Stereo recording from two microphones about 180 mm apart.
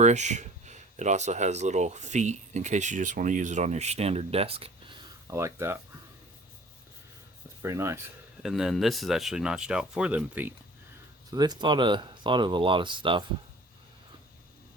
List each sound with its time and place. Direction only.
0.0 s speech: 40° right (ahead or behind)
5.3 s speech: 15° right (ahead or behind)
7.6 s speech: 15° right (ahead or behind)
8.4 s speech: centre (ahead or behind)
11.3 s speech: 25° right (ahead or behind)